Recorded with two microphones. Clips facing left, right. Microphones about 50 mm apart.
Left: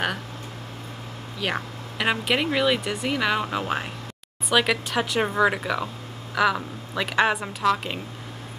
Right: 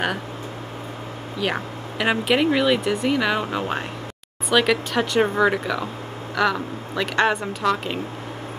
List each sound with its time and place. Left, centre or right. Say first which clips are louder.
1.4 s speech: right 3 dB; centre